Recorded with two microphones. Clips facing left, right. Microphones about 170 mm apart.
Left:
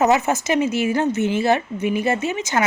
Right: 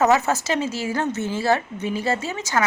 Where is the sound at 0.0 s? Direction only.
20° left (ahead or behind).